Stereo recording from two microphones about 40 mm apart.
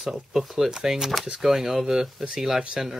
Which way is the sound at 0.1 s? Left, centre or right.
Centre.